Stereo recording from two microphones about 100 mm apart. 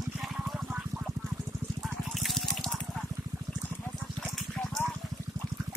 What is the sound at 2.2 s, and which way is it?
Water, centre (ahead or behind).